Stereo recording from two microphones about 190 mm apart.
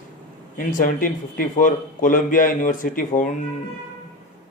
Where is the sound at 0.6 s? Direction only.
45° left (ahead or behind).